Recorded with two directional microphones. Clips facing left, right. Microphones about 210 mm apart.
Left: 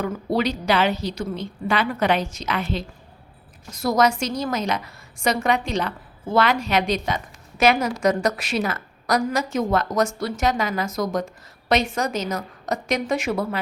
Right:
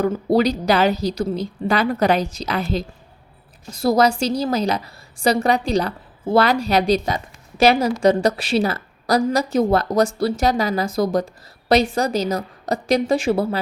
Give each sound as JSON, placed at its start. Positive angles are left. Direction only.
{"t": 0.0, "sound": "a woman's voice", "side_deg": -35}